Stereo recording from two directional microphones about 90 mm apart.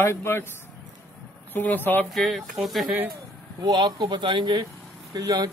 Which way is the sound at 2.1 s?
Centre (ahead or behind).